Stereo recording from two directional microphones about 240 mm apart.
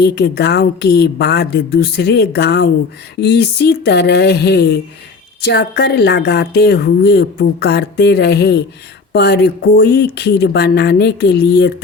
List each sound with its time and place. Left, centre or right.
0.0 s speech: left